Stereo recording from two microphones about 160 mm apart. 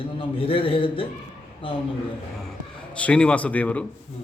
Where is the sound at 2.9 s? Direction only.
5° left (ahead or behind).